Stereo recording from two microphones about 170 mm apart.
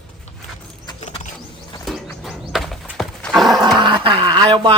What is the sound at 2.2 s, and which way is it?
Horse, centre (ahead or behind).